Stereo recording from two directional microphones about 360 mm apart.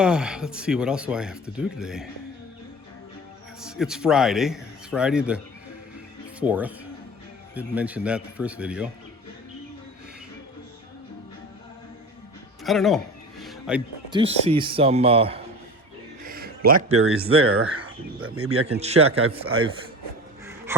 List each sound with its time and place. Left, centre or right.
0.0 s speech: centre
3.6 s speech: centre
6.4 s speech: centre
12.6 s speech: centre
13.4 s music: centre
14.2 s a man's voice: centre
16.2 s music: right
16.9 s speech: right
20.7 s a sound: centre